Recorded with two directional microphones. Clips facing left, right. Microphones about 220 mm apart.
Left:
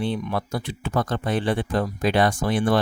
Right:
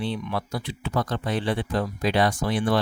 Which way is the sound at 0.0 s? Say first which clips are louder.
Left 3 dB; 50° left (ahead or behind).